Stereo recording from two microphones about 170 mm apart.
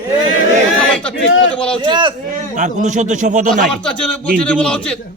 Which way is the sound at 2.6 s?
45° right (ahead or behind).